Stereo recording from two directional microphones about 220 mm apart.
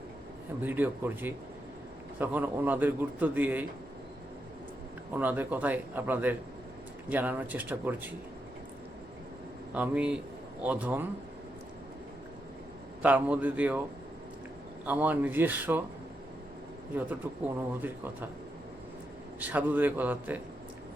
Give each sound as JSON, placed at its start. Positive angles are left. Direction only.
{"t": 0.6, "sound": "speech", "side_deg": -10}
{"t": 5.1, "sound": "speech", "side_deg": -10}
{"t": 9.7, "sound": "a man's voice", "side_deg": -5}
{"t": 13.0, "sound": "speech", "side_deg": -5}
{"t": 14.8, "sound": "speech", "side_deg": -5}
{"t": 16.9, "sound": "speech", "side_deg": -5}
{"t": 19.4, "sound": "speech", "side_deg": -5}